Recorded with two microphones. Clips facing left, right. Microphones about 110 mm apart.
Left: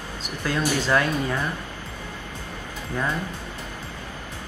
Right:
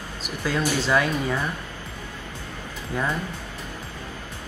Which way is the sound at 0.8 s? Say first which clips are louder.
Even; 10° right (ahead or behind).